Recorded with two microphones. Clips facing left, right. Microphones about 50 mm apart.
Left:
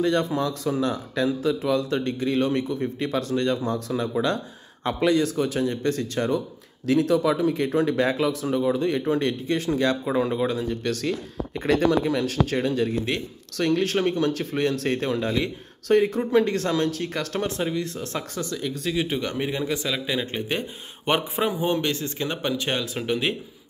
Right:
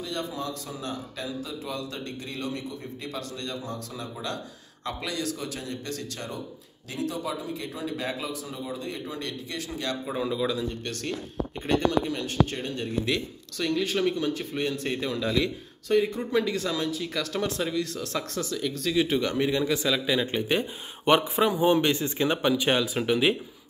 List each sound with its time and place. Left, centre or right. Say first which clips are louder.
0.0 s a man's voice: left 10 dB; left
6.9 s speech: left 11 dB; left
10.4 s speech: left 3 dB; left
10.7 s speech: left 7 dB; left
13.6 s speech: left 4 dB; left
15.0 s speech: left 3 dB; left
15.9 s a man's voice: left 5 dB; left
18.3 s speech: left 1 dB; centre
21.1 s speech: right 2 dB; centre
21.6 s speech: right 2 dB; centre
22.4 s speech: right 1 dB; centre